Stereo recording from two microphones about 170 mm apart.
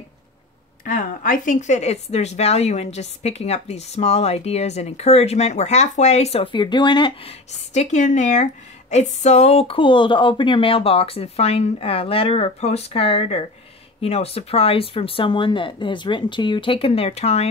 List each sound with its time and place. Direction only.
0.8 s speech: 50° left (ahead or behind); by 7.3 s 30° left (ahead or behind)
7.5 s speech: 40° left (ahead or behind)